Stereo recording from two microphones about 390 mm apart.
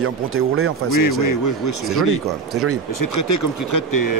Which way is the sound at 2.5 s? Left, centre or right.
Right.